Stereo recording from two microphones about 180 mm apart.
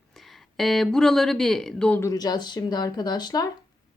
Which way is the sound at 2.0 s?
20° left (ahead or behind).